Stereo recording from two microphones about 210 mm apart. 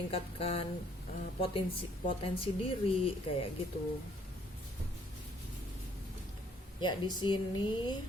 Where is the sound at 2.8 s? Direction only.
25° left (ahead or behind).